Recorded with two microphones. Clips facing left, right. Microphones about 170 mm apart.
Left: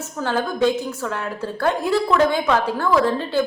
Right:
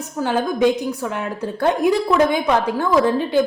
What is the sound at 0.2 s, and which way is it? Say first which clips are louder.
A woman's voice: right 3 dB; 15° right (ahead or behind).